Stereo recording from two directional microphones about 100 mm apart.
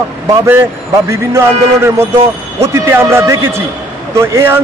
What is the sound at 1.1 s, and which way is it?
A man's voice, 30° right (ahead or behind).